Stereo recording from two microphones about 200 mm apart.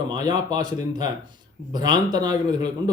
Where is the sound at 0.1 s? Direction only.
20° right (ahead or behind).